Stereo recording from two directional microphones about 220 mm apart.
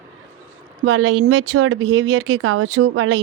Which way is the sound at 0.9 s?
65° right (ahead or behind).